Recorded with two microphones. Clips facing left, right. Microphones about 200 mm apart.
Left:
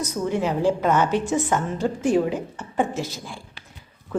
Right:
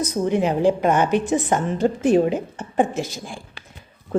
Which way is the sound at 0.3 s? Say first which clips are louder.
Right 3 dB; 15° right (ahead or behind).